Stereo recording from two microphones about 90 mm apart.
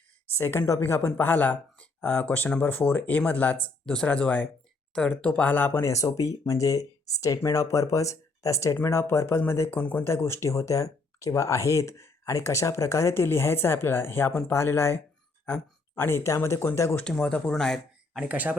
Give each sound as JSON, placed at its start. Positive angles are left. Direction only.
{"t": 0.3, "sound": "speech", "side_deg": 25}
{"t": 17.0, "sound": "speech", "side_deg": 10}
{"t": 18.1, "sound": "speech", "side_deg": -15}